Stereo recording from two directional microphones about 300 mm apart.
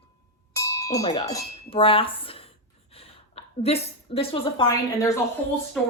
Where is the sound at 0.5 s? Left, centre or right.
Centre.